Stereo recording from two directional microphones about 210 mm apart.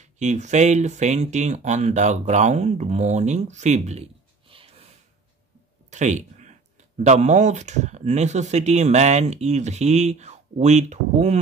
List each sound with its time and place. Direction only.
0.0 s speech: 35° right (ahead or behind)
5.9 s a sound: 35° right (ahead or behind)
7.0 s speech: 35° right (ahead or behind)